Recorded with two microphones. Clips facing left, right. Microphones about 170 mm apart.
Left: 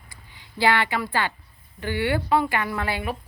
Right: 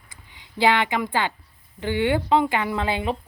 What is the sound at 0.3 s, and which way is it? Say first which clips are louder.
Speech: right 2 dB; 20° right (ahead or behind).